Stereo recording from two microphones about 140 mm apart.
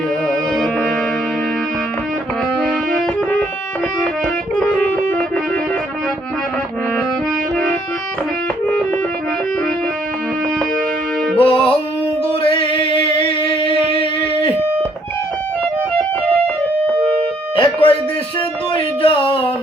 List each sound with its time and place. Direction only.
0.3 s music: 5° left (ahead or behind)
4.6 s music: 10° left (ahead or behind)
11.3 s music: 40° left (ahead or behind)
17.6 s music: 40° left (ahead or behind)